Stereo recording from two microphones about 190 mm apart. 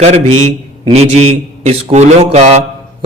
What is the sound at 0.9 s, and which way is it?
A man's voice, 35° right (ahead or behind).